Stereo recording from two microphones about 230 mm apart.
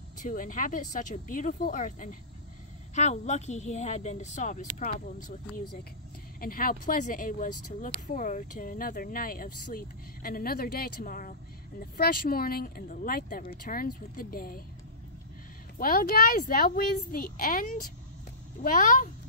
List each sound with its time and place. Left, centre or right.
0.2 s speech: left
6.4 s speech: left
15.8 s speech: left